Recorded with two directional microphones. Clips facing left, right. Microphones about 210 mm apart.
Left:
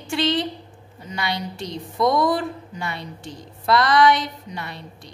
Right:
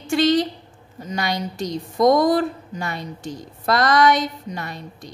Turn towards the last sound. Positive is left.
turn(degrees=-45)  # may be behind; listen again after turning